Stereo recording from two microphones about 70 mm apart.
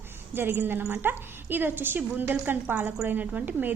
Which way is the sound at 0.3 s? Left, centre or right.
Right.